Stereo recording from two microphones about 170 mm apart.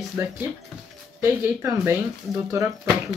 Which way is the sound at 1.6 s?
15° right (ahead or behind).